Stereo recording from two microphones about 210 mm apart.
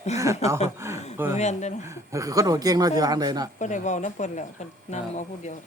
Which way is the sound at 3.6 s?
35° left (ahead or behind).